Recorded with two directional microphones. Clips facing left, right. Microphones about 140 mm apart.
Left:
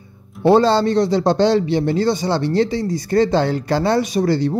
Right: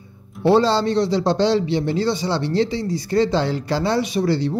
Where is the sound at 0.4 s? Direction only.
50° left (ahead or behind).